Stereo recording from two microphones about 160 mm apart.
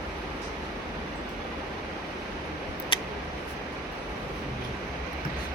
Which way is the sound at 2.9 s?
30° left (ahead or behind).